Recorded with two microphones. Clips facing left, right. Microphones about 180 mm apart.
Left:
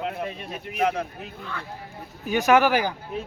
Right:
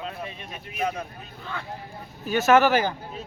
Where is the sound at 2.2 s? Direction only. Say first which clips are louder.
Even; 15° left (ahead or behind).